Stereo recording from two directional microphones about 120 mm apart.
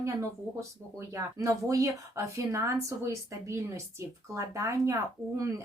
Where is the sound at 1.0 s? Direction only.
25° right (ahead or behind).